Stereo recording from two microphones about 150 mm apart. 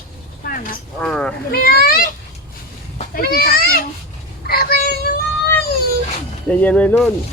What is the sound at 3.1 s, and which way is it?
Speech, 80° left.